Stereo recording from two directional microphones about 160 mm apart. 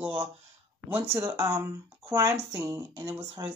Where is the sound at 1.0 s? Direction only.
15° right (ahead or behind).